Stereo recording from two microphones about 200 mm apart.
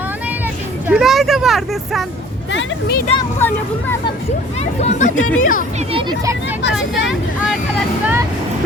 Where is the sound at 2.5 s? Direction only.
55° left (ahead or behind).